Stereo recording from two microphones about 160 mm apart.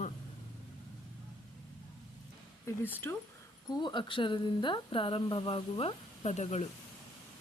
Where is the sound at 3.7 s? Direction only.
30° left (ahead or behind); by 6.6 s 45° left (ahead or behind).